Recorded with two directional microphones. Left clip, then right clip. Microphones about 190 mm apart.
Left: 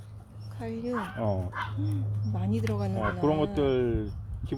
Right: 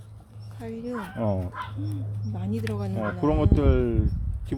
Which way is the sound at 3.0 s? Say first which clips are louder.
Right 2 dB; 45° right (ahead or behind).